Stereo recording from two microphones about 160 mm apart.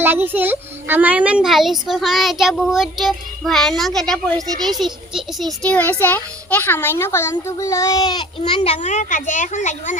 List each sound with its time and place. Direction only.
0.0 s a child's voice: 15° right (ahead or behind)
5.6 s a child's voice: 10° left (ahead or behind); by 8.3 s 25° left (ahead or behind)
8.4 s a child's voice: 40° left (ahead or behind)
8.8 s a woman's voice: 50° left (ahead or behind)